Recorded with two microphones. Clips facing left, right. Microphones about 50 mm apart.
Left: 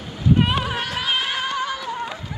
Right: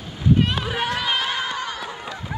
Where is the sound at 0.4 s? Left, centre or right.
Centre.